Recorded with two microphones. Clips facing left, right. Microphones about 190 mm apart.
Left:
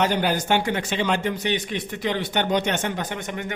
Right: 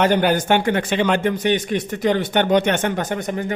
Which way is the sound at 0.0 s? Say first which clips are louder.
Right 5 dB; 55° right (ahead or behind).